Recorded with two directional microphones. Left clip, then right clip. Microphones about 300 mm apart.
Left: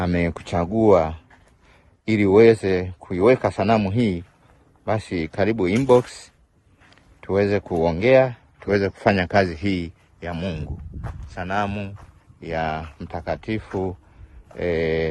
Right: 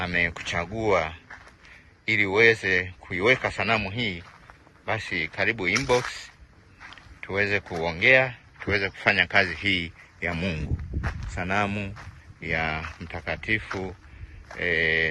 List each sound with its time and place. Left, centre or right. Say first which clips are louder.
0.0 s speech: left 1 dB; left